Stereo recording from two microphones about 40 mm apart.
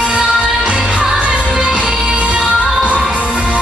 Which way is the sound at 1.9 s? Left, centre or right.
Centre.